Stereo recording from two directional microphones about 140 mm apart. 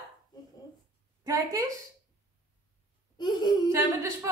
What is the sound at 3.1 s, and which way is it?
Laughter, 30° left (ahead or behind).